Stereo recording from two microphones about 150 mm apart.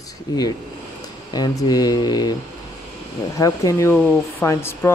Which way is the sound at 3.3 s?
20° left (ahead or behind).